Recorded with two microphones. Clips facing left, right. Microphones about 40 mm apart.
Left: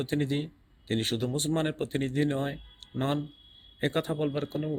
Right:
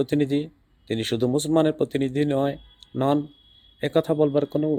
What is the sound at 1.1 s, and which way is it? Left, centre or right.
Speech, right.